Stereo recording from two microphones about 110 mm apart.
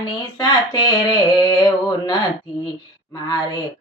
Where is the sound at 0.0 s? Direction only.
40° left (ahead or behind).